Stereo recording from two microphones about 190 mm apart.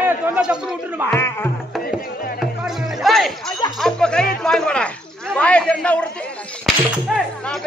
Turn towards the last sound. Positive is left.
turn(degrees=0)  # may be behind; listen again after turning